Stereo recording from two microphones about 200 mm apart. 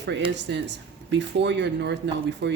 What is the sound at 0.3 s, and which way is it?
Speech, 60° right (ahead or behind).